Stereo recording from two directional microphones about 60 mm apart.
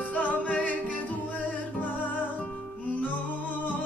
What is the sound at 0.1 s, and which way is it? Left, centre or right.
Music, left.